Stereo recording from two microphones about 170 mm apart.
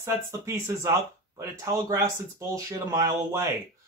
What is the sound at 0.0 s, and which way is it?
Speech, 15° right (ahead or behind).